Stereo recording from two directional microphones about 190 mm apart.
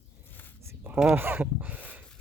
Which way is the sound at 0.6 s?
10° right (ahead or behind).